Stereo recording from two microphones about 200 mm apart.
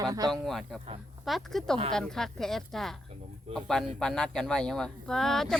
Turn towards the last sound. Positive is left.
turn(degrees=0)  # may be behind; listen again after turning